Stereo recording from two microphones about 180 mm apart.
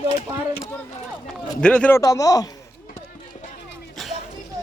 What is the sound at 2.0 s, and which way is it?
Speech, 20° left (ahead or behind).